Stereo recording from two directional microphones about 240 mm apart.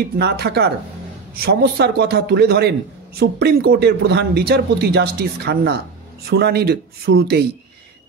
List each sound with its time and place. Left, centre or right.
0.2 s a man's voice: right